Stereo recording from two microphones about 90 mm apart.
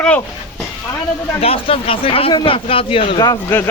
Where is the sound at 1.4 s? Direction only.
90° left.